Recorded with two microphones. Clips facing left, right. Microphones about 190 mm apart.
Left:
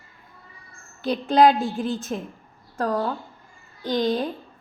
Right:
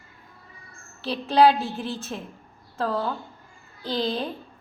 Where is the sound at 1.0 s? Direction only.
15° left (ahead or behind).